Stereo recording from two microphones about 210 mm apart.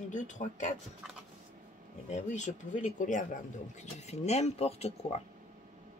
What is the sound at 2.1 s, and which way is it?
Speech, 35° left (ahead or behind).